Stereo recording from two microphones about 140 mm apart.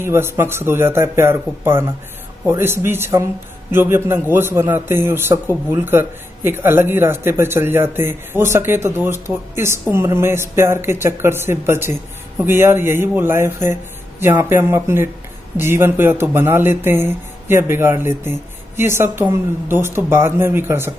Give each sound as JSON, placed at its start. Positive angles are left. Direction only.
{"t": 0.0, "sound": "a man's voice", "side_deg": -15}